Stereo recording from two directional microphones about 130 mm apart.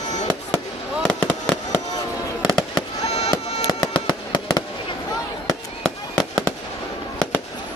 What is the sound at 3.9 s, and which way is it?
Music, 35° left (ahead or behind).